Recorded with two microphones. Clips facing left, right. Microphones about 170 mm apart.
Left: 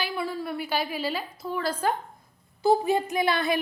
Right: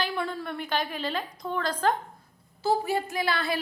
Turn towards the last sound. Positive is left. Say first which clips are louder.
# left 4 dB
turn(degrees=20)  # may be behind; listen again after turning